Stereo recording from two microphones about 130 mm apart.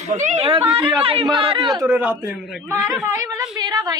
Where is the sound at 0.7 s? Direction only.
40° right (ahead or behind).